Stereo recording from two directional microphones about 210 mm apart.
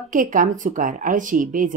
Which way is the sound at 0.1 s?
40° right (ahead or behind).